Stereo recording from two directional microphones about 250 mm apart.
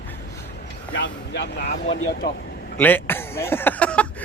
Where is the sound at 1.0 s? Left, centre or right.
Left.